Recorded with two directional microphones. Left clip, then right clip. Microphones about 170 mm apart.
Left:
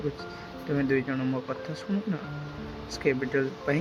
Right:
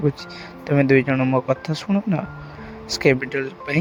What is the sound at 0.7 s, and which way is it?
Speech, 45° right (ahead or behind).